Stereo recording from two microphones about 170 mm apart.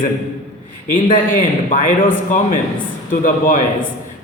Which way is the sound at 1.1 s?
55° left (ahead or behind).